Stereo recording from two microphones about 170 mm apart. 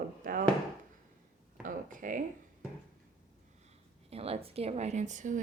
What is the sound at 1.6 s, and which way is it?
Speech, 50° right (ahead or behind).